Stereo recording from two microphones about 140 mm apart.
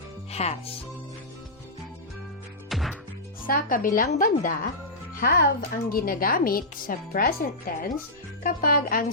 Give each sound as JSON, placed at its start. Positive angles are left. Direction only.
{"t": 0.3, "sound": "speech", "side_deg": 50}
{"t": 2.6, "sound": "music", "side_deg": 0}
{"t": 3.4, "sound": "speech", "side_deg": 85}
{"t": 5.1, "sound": "speech", "side_deg": 90}